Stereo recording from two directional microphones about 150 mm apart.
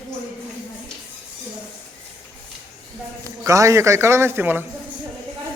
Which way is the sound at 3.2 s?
20° right (ahead or behind).